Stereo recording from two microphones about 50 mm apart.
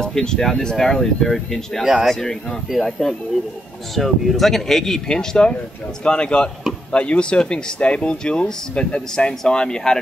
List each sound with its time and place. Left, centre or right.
0.0 s speech: centre
1.9 s speech: centre
3.9 s speech: centre